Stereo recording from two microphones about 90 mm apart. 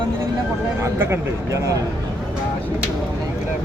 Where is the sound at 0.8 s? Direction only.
35° right (ahead or behind).